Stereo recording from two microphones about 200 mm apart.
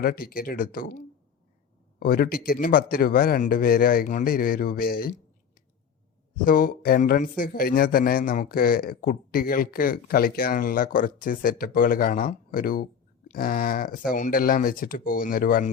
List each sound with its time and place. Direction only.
0.0 s speech: 50° left (ahead or behind)
6.3 s speech: 45° left (ahead or behind)